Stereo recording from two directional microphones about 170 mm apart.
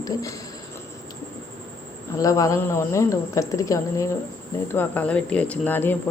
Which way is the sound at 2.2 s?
20° left (ahead or behind).